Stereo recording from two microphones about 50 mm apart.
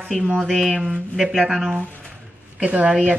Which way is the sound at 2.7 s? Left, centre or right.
Right.